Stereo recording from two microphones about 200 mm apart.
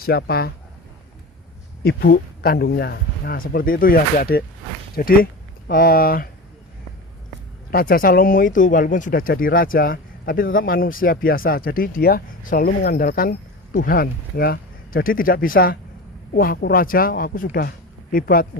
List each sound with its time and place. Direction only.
0.0 s speech: 50° left (ahead or behind)
1.8 s speech: 50° left (ahead or behind)
7.7 s speech: 45° left (ahead or behind)